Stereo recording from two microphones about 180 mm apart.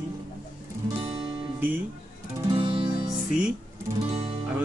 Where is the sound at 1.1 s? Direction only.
10° right (ahead or behind).